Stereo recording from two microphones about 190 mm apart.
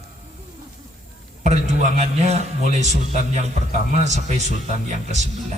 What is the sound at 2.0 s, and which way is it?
A man's voice, 35° right (ahead or behind).